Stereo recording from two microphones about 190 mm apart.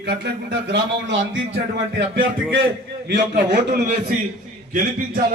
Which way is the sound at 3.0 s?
60° right (ahead or behind).